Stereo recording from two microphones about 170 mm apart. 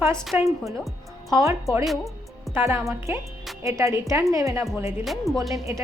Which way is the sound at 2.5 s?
15° right (ahead or behind).